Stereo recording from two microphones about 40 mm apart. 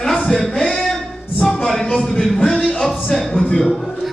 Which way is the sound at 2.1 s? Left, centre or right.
Centre.